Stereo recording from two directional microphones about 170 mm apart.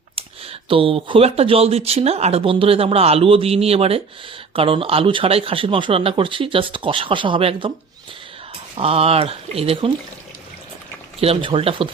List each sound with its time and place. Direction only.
0.2 s speech: 35° right (ahead or behind)
8.8 s speech: 35° right (ahead or behind)
11.2 s speech: 35° right (ahead or behind)